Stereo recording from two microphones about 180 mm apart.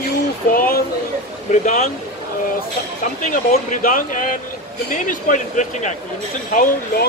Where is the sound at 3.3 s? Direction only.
45° left (ahead or behind).